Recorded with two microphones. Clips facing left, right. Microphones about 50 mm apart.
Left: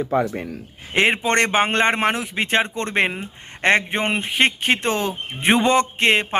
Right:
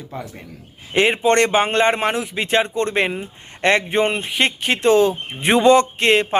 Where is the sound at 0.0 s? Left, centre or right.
Left.